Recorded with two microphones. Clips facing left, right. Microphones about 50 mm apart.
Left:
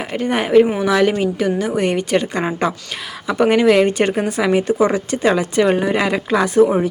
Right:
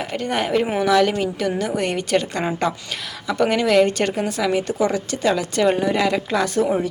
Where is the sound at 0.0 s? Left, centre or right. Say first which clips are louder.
Left 3 dB; centre.